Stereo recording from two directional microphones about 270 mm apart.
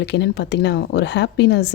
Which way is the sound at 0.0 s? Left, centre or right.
Left.